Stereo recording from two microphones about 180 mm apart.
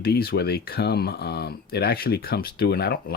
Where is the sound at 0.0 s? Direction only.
60° left (ahead or behind).